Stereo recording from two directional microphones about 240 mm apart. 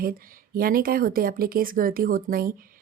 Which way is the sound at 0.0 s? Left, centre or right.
Right.